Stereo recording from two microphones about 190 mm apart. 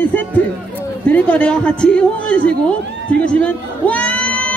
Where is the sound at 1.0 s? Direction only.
10° left (ahead or behind).